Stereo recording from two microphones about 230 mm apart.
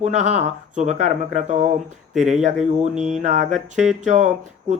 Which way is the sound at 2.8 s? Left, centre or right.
Right.